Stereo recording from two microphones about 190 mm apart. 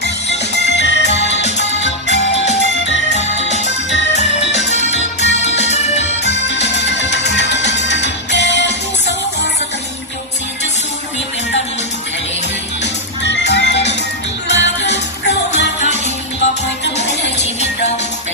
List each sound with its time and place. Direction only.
0.5 s music: 65° left (ahead or behind)
1.4 s music: 40° left (ahead or behind)
5.2 s music: 70° left (ahead or behind)
5.7 s music: 35° left (ahead or behind)
6.2 s music: 65° left (ahead or behind)
12.8 s music: 65° left (ahead or behind)